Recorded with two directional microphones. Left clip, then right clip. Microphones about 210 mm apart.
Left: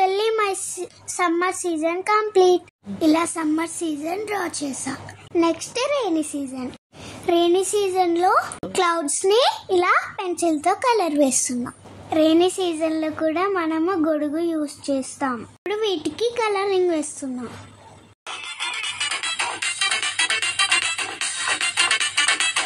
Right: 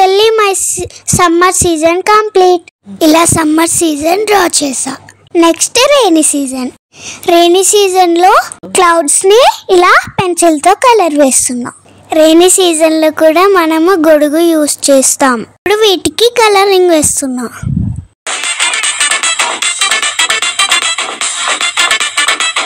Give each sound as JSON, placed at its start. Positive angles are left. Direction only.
{"t": 0.0, "sound": "a child's voice", "side_deg": -45}
{"t": 18.2, "sound": "music", "side_deg": -50}